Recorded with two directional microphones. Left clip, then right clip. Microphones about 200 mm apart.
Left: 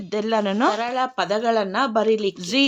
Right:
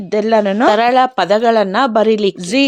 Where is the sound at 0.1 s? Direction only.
25° right (ahead or behind).